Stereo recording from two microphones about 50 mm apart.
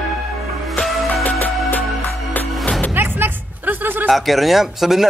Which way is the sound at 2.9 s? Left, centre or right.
Right.